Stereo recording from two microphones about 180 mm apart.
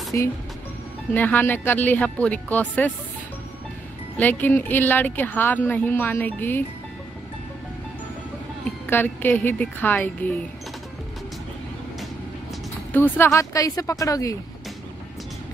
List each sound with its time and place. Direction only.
0.1 s a woman's voice: 15° left (ahead or behind)
4.2 s a woman's voice: 10° left (ahead or behind)
8.9 s a woman's voice: 10° left (ahead or behind)
12.9 s a woman's voice: 10° left (ahead or behind)